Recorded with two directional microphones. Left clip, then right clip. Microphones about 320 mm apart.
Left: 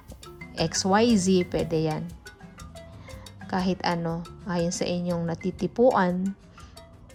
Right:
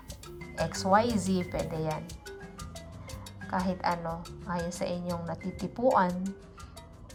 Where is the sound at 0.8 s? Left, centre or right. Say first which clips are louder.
Left 3 dB; left.